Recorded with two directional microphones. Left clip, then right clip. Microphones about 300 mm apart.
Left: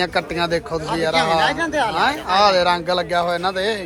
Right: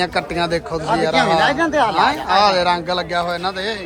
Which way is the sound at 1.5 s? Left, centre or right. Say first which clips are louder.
Right 4 dB; right.